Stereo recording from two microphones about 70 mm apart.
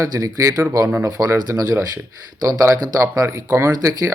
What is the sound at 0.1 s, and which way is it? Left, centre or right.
Speech, right.